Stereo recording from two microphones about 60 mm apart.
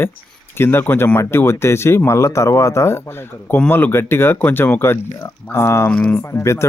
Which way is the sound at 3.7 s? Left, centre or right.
Left.